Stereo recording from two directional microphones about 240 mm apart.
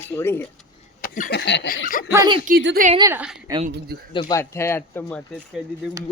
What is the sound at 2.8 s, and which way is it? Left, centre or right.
Speech, centre.